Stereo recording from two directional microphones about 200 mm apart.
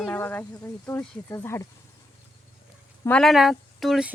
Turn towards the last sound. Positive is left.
turn(degrees=0)  # may be behind; listen again after turning